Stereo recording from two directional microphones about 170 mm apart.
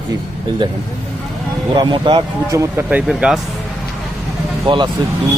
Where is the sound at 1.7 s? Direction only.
25° right (ahead or behind).